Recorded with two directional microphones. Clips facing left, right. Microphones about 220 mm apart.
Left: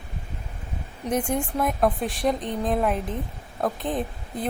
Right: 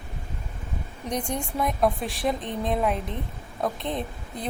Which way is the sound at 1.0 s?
5° left (ahead or behind).